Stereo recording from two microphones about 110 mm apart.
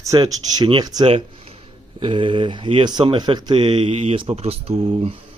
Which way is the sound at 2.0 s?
50° right (ahead or behind).